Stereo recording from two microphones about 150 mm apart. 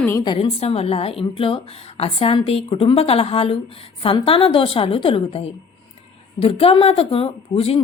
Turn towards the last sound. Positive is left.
turn(degrees=40)  # may be behind; listen again after turning